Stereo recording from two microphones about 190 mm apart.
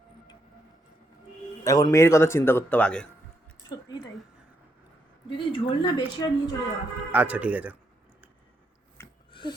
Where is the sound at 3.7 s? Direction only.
20° left (ahead or behind).